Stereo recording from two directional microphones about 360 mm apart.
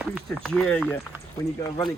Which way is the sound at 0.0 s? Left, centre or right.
Centre.